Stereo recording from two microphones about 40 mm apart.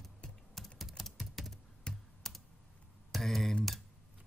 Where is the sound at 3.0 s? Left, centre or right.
Centre.